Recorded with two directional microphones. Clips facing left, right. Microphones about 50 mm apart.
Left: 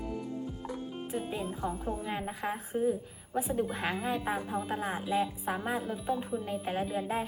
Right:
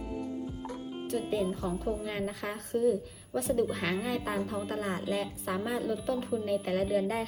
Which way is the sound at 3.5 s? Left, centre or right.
Right.